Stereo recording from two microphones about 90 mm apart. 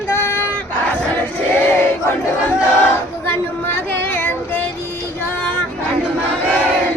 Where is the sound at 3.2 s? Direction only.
20° left (ahead or behind).